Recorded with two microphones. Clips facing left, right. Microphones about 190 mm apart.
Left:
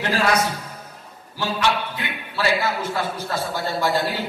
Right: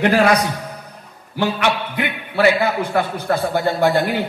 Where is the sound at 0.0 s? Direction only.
60° right (ahead or behind).